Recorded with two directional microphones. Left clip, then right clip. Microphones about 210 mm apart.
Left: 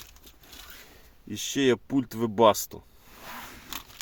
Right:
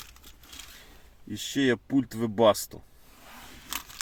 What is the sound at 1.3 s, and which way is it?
Speech, centre (ahead or behind).